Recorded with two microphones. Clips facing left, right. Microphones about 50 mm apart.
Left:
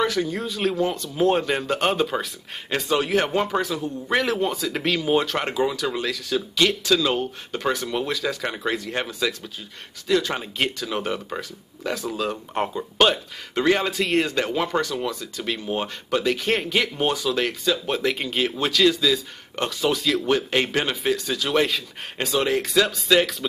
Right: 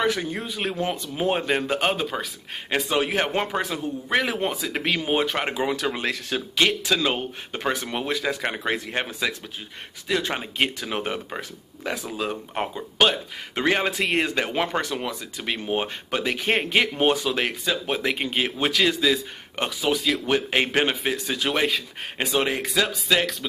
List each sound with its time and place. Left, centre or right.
0.0 s speech: right; by 2.2 s centre
2.7 s speech: centre
4.1 s speech: centre
5.9 s speech: right; by 13.2 s centre
13.6 s speech: right
21.5 s speech: centre
22.2 s speech: right
22.8 s speech: centre